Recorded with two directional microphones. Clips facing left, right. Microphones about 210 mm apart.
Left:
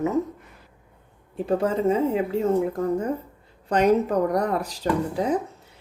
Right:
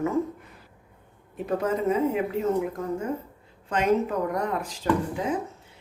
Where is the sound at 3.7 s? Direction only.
40° left (ahead or behind).